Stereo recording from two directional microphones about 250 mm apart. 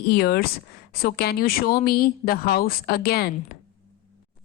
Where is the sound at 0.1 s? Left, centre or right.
Left.